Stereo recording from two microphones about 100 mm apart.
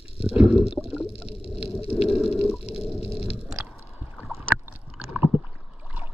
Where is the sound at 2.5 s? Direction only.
85° left.